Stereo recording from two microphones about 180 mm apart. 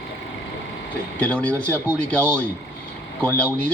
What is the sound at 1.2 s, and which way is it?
A man's voice, 5° left (ahead or behind).